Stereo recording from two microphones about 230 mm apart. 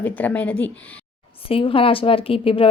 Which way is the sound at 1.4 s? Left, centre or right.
Left.